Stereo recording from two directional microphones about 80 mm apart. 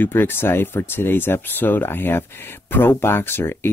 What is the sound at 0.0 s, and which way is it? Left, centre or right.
Speech, left.